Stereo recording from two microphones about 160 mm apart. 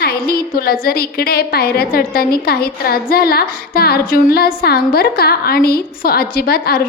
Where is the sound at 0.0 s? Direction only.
75° left (ahead or behind).